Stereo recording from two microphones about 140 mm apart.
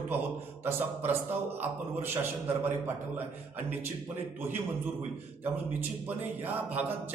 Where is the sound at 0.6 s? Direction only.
15° right (ahead or behind).